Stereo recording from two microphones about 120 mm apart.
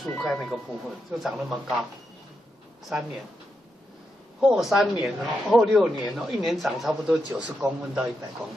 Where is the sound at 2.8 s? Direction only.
Centre (ahead or behind).